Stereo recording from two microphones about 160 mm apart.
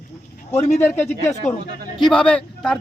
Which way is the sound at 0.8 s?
15° left (ahead or behind).